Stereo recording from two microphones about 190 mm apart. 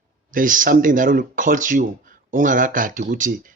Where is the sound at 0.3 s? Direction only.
45° right (ahead or behind).